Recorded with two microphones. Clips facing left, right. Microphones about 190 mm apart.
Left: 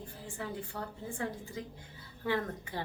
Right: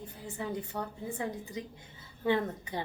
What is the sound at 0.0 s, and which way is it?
A woman's voice, 20° right (ahead or behind).